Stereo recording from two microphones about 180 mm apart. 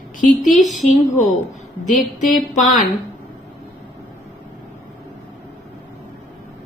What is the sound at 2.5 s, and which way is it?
Speech, 45° left (ahead or behind).